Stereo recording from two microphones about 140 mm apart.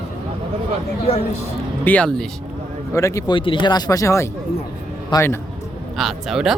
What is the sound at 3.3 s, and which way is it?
Speech, 40° left (ahead or behind).